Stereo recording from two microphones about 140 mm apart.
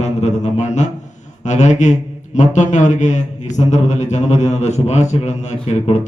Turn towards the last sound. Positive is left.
turn(degrees=55)  # may be behind; listen again after turning